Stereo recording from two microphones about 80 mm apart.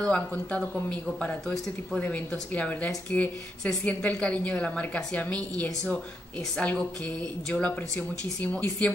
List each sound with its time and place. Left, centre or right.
0.0 s a woman's voice: centre